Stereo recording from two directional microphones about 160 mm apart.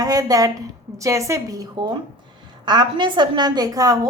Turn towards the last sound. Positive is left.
turn(degrees=-25)  # may be behind; listen again after turning